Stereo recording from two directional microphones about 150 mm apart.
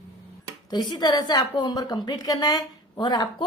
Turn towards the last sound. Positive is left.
turn(degrees=30)  # may be behind; listen again after turning